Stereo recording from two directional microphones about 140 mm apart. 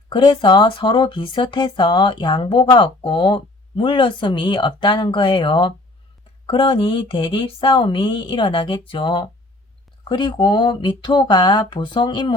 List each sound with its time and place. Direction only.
0.1 s speech: 35° left (ahead or behind)